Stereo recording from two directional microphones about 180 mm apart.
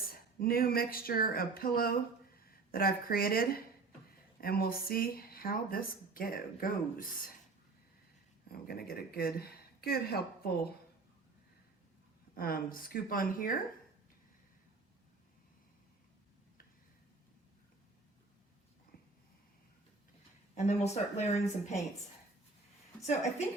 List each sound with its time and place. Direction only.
0.1 s a woman's voice: 55° left (ahead or behind)
8.4 s a woman's voice: 60° left (ahead or behind)
12.3 s a woman's voice: 55° left (ahead or behind)
20.6 s speech: 40° left (ahead or behind)